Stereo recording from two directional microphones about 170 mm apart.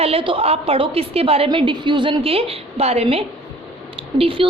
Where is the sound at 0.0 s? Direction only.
35° right (ahead or behind).